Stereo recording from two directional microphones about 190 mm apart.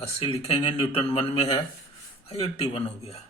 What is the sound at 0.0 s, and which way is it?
A man's voice, 30° left (ahead or behind).